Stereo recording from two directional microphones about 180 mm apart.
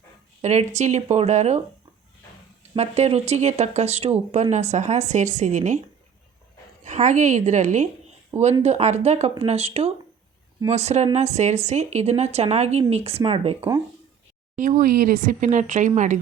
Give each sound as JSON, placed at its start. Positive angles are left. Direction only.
{"t": 0.4, "sound": "speech", "side_deg": -40}
{"t": 2.7, "sound": "speech", "side_deg": -35}
{"t": 6.8, "sound": "speech", "side_deg": -40}
{"t": 13.6, "sound": "speech", "side_deg": -20}
{"t": 14.5, "sound": "speech", "side_deg": -45}